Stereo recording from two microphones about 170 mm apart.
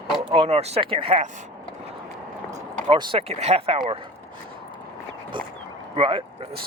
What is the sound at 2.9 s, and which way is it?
Speech, 30° right (ahead or behind).